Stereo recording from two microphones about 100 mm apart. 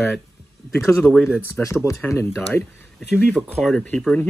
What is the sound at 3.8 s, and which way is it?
Speech, 10° left (ahead or behind).